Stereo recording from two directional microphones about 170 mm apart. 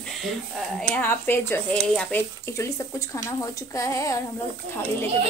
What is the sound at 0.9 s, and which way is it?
Speech, 10° left (ahead or behind).